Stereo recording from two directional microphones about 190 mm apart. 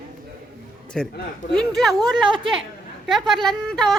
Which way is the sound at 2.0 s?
25° right (ahead or behind).